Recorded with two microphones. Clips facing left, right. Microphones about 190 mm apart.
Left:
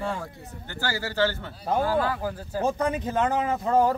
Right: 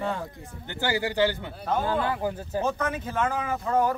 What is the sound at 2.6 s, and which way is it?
Speech, 30° left (ahead or behind).